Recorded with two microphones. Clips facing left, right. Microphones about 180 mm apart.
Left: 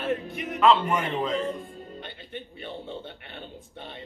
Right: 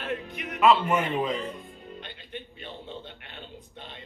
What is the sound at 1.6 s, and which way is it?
Music, 45° left (ahead or behind).